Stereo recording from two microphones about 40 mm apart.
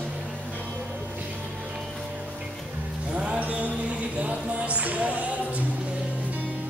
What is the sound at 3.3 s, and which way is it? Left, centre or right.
Mantra, right.